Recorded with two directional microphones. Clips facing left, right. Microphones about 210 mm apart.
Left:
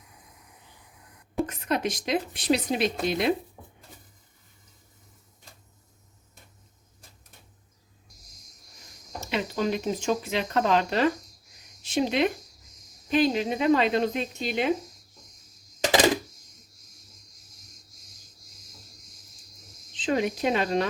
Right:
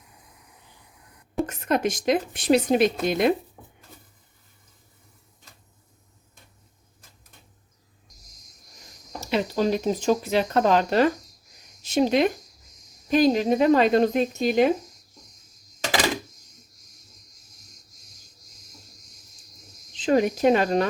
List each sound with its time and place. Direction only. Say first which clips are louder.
1.5 s speech: right 4 dB; 50° right (ahead or behind)
9.3 s speech: right 4 dB; 35° right (ahead or behind)
20.0 s speech: right 5 dB; 45° right (ahead or behind)